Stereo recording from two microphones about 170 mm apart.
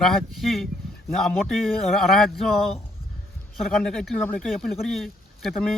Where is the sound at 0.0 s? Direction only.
Centre (ahead or behind).